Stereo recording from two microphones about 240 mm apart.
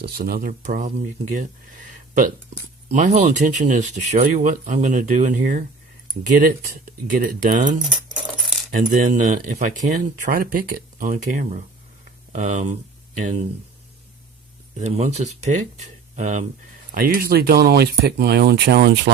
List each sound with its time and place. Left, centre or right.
0.0 s speech: right
2.9 s speech: right
14.8 s speech: right